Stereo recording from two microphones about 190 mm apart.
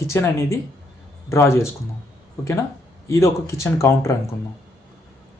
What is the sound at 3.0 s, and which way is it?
Speech, 15° left (ahead or behind).